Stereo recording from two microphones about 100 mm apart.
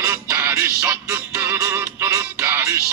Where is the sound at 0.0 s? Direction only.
25° right (ahead or behind).